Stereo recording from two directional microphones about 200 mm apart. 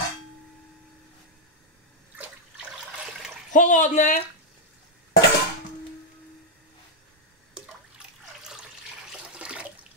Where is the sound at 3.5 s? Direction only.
40° left (ahead or behind).